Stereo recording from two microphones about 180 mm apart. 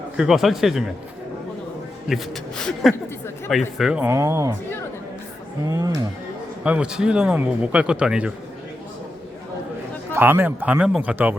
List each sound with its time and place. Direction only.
0.2 s speech: centre (ahead or behind)
2.0 s a man's voice: centre (ahead or behind)
3.8 s speech: 5° right (ahead or behind)
5.7 s speech: 20° right (ahead or behind)
6.7 s speech: 5° right (ahead or behind)
10.2 s speech: 10° right (ahead or behind)